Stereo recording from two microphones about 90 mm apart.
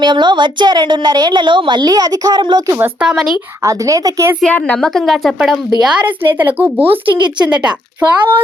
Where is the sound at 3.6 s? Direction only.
40° right (ahead or behind).